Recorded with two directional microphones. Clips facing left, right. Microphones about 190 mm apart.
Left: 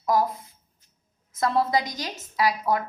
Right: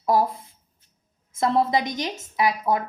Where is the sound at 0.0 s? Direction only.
30° right (ahead or behind).